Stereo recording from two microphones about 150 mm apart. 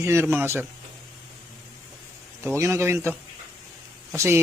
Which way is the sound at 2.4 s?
20° right (ahead or behind).